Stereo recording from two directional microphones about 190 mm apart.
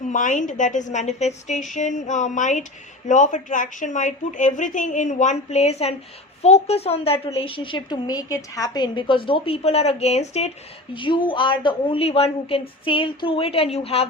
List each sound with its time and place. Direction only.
0.1 s a woman's voice: 40° left (ahead or behind)